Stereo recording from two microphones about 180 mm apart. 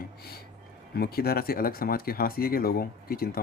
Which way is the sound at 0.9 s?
60° left (ahead or behind).